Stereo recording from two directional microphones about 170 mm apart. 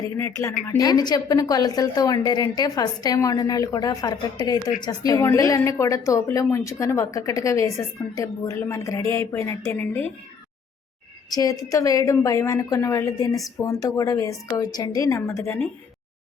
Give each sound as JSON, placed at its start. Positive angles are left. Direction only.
{"t": 0.0, "sound": "a woman's voice", "side_deg": 15}
{"t": 11.3, "sound": "a woman's voice", "side_deg": 20}